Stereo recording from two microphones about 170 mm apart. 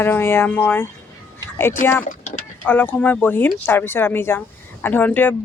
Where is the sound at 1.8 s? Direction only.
50° left (ahead or behind).